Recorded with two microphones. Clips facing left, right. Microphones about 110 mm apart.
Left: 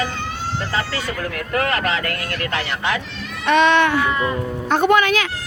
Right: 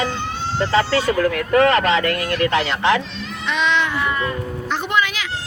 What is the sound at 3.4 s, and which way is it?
Speech, 55° left (ahead or behind).